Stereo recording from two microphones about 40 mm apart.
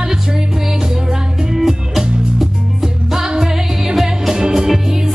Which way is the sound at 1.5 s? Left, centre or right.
Centre.